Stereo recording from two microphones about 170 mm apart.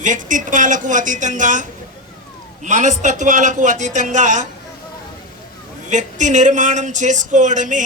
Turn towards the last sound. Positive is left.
turn(degrees=-50)  # may be behind; listen again after turning